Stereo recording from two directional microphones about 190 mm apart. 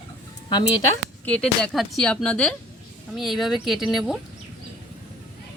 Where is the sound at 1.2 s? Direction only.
Centre (ahead or behind).